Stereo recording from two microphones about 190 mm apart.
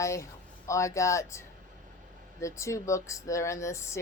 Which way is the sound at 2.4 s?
15° left (ahead or behind).